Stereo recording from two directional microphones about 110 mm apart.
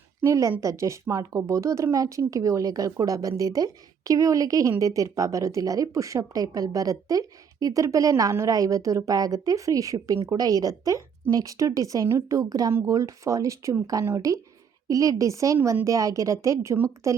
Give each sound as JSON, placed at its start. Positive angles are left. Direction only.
{"t": 0.2, "sound": "a woman's voice", "side_deg": -25}